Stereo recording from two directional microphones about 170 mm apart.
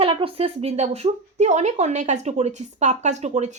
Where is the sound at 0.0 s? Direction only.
30° right (ahead or behind).